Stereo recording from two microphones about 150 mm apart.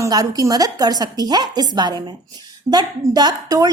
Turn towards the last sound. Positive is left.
turn(degrees=-25)  # may be behind; listen again after turning